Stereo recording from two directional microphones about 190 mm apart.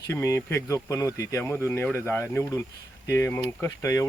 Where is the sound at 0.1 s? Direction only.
15° left (ahead or behind).